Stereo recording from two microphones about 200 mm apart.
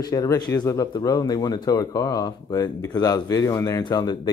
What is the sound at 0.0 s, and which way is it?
Speech, 15° left (ahead or behind).